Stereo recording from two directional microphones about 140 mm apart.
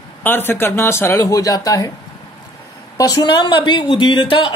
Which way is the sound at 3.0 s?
25° left (ahead or behind).